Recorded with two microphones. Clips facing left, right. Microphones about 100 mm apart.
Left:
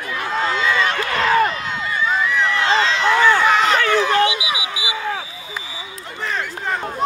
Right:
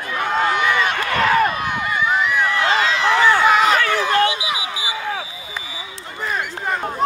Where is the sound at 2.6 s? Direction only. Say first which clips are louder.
Left 2 dB; 25° left (ahead or behind).